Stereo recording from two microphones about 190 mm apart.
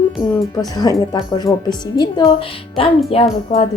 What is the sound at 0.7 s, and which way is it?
A woman's voice, 20° left (ahead or behind).